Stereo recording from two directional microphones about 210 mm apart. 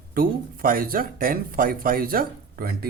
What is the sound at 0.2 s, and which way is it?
Speech, 45° right (ahead or behind).